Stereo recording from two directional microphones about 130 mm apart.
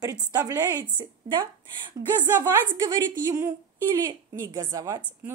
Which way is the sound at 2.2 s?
15° right (ahead or behind).